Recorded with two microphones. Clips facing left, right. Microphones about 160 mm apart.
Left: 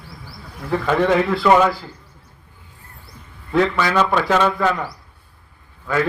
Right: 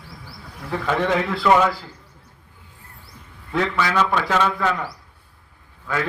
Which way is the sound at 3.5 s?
35° left (ahead or behind).